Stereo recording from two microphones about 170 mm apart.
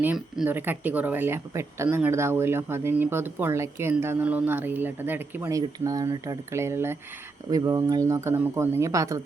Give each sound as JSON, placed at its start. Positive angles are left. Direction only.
{"t": 0.0, "sound": "speech", "side_deg": -10}